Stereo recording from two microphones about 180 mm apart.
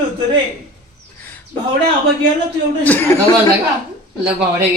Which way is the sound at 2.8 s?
10° left (ahead or behind).